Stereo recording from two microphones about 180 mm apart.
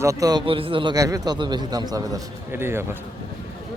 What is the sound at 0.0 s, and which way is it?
A man's voice, 20° right (ahead or behind).